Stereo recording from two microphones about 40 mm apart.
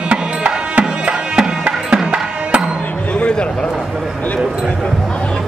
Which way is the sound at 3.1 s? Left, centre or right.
Left.